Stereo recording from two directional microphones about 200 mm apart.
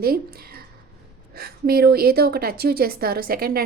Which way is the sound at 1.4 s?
50° right (ahead or behind).